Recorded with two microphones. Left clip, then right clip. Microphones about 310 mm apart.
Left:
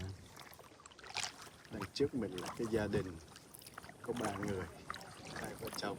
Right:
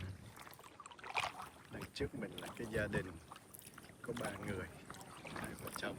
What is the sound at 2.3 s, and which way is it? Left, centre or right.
Speech, left.